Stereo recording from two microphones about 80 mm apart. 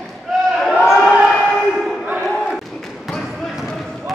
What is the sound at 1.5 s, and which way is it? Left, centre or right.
Battle cry, centre.